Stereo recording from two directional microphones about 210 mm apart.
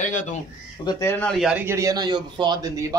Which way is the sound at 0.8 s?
10° left (ahead or behind).